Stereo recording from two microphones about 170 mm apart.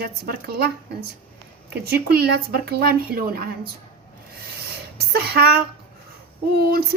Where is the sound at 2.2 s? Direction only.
65° right (ahead or behind).